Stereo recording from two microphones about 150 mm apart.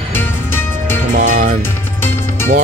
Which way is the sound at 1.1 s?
55° right (ahead or behind).